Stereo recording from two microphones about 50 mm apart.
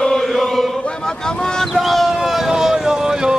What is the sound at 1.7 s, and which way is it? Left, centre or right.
Vehicle, centre.